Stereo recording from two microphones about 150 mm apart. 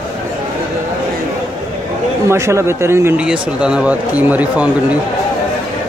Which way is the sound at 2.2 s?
20° right (ahead or behind).